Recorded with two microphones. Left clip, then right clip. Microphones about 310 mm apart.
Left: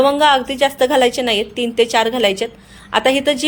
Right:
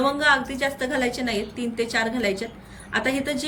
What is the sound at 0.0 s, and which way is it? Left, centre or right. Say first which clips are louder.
A woman's voice: left 8 dB; centre.